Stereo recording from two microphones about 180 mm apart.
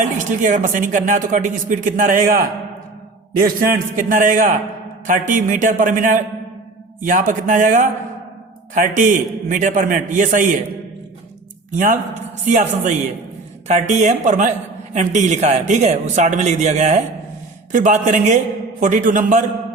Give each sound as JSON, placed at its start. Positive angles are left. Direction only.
{"t": 0.0, "sound": "speech", "side_deg": -45}
{"t": 3.4, "sound": "speech", "side_deg": -50}
{"t": 11.7, "sound": "speech", "side_deg": -45}